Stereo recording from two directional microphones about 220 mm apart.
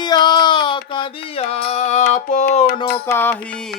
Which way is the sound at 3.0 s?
10° left (ahead or behind).